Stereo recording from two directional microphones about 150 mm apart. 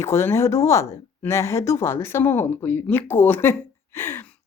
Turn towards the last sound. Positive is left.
turn(degrees=10)  # may be behind; listen again after turning